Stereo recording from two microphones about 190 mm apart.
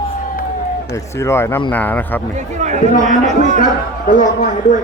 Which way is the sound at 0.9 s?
15° left (ahead or behind).